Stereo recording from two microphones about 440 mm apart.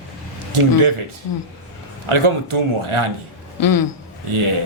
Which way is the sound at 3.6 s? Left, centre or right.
Left.